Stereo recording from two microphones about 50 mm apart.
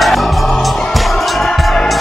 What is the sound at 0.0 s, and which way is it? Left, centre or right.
Music, centre.